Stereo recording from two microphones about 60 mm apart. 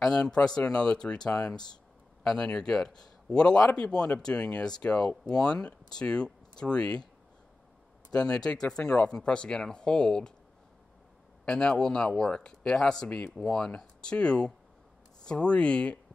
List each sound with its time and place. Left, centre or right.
0.1 s speech: centre
8.3 s speech: centre
11.4 s speech: centre